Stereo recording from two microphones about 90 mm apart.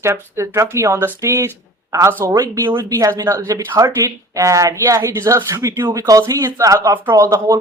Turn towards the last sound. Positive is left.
turn(degrees=-35)  # may be behind; listen again after turning